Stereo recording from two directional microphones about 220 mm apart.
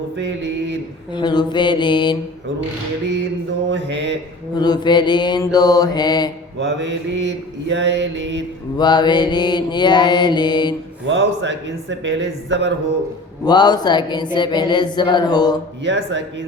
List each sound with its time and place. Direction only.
0.2 s mantra: 55° right (ahead or behind)
1.1 s speech: 20° left (ahead or behind)
3.7 s mantra: 55° right (ahead or behind)
4.5 s speech: 20° left (ahead or behind)
6.6 s mantra: 55° right (ahead or behind)
8.8 s speech: 20° left (ahead or behind)
11.0 s mantra: 55° right (ahead or behind)
13.4 s speech: 20° left (ahead or behind)
15.8 s mantra: 55° right (ahead or behind)